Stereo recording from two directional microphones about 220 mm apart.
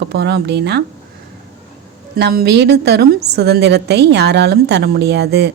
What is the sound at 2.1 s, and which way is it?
A woman's voice, 50° right (ahead or behind).